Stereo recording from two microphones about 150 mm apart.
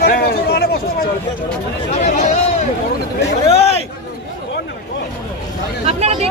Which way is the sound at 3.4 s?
40° left (ahead or behind).